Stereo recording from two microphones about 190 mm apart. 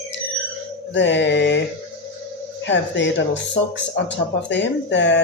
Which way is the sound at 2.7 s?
70° left (ahead or behind).